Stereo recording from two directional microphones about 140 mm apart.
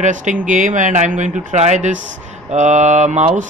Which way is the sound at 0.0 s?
65° right (ahead or behind).